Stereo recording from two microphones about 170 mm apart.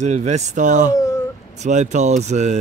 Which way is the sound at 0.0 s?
40° right (ahead or behind).